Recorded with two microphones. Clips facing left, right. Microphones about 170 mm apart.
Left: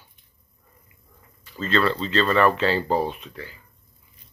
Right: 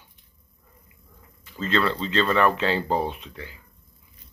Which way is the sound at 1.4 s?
15° right (ahead or behind).